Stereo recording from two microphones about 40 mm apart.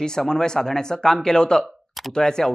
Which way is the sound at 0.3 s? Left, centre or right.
Centre.